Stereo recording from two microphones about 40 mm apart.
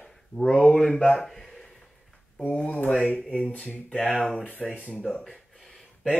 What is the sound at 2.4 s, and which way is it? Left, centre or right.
Speech, left.